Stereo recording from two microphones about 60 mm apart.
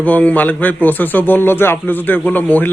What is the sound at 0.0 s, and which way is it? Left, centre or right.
A man's voice, left.